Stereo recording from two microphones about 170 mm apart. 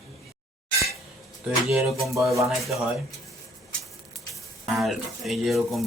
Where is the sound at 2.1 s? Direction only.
20° right (ahead or behind).